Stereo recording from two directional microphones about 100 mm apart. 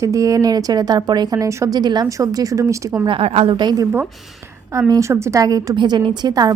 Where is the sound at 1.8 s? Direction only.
45° right (ahead or behind).